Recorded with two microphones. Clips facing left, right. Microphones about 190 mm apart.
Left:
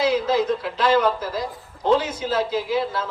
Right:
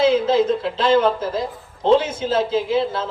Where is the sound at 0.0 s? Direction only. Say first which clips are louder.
Right 4 dB; 25° right (ahead or behind).